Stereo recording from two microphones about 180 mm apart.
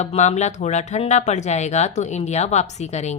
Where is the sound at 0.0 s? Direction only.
40° left (ahead or behind).